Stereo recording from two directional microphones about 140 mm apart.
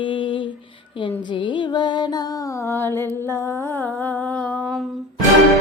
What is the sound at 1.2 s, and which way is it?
Music, 35° left (ahead or behind).